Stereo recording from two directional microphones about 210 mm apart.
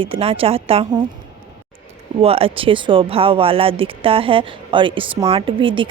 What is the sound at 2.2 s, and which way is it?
Speech, 25° right (ahead or behind).